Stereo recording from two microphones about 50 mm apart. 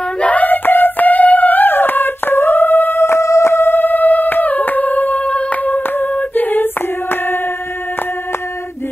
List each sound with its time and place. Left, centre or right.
0.2 s music: left
3.0 s music: left
3.5 s music: left
6.1 s singing: left